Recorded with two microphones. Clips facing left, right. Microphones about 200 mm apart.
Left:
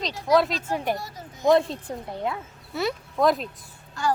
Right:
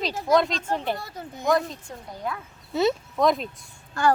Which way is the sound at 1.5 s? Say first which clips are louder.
Left 4 dB; 30° left (ahead or behind).